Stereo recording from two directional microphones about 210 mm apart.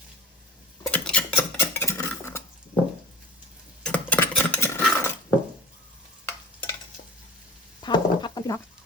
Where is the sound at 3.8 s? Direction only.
5° left (ahead or behind).